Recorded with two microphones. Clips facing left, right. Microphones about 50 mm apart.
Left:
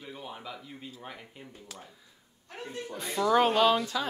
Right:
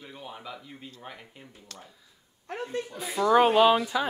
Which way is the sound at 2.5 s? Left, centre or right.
Right.